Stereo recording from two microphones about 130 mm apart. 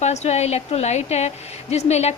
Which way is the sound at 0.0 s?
60° left (ahead or behind).